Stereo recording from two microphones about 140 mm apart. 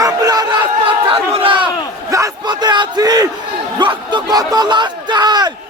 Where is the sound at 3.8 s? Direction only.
35° right (ahead or behind).